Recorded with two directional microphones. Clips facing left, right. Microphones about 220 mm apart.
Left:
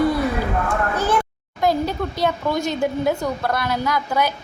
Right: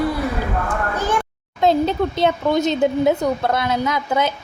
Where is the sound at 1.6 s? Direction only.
25° right (ahead or behind).